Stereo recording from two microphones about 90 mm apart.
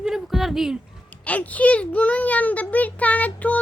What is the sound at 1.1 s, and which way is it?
A child's voice, 15° left (ahead or behind).